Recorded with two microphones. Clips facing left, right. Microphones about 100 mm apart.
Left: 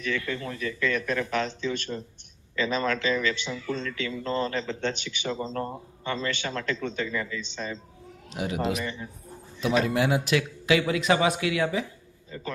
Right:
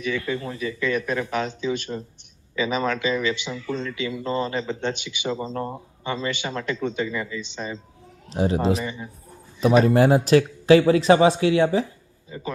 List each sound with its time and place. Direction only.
0.3 s speech: 15° right (ahead or behind)
8.3 s speech: 35° right (ahead or behind)
8.8 s speech: 15° right (ahead or behind)
9.8 s speech: 40° right (ahead or behind)
12.3 s speech: 10° right (ahead or behind)